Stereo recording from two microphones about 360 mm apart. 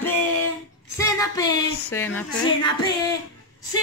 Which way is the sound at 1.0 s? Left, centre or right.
Centre.